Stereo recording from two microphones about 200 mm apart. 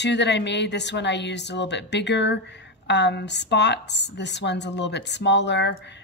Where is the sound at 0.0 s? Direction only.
60° left (ahead or behind).